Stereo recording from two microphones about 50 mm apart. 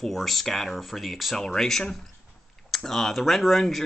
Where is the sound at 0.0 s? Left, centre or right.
Centre.